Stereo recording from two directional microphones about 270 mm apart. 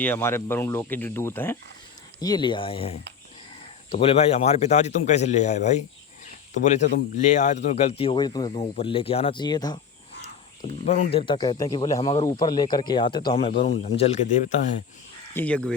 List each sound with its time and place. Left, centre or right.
0.0 s speech: centre
10.8 s speech: left
15.4 s speech: centre